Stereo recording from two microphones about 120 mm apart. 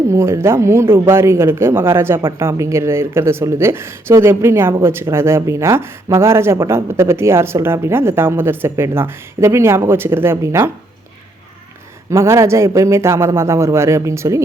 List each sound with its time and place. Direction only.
0.1 s speech: 25° right (ahead or behind)
12.1 s speech: 25° right (ahead or behind)